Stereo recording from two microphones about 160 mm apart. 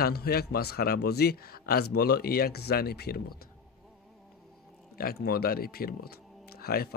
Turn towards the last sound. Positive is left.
turn(degrees=70)  # may be behind; listen again after turning